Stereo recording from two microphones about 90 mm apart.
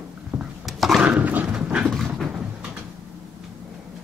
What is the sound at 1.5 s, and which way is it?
Dog, 10° right (ahead or behind).